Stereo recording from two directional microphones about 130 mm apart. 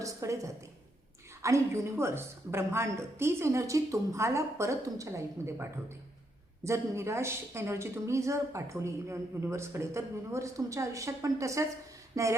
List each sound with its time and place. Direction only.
0.0 s speech: 25° right (ahead or behind)
6.7 s speech: 20° right (ahead or behind)